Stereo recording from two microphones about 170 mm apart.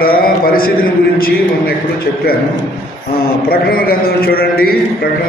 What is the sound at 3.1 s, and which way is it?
A man's voice, 60° left (ahead or behind).